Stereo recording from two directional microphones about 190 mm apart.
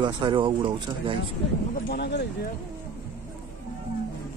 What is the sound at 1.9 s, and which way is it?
Speech, 60° left (ahead or behind).